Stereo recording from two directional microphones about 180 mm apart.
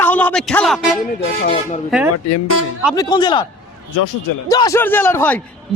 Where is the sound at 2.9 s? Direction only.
20° left (ahead or behind).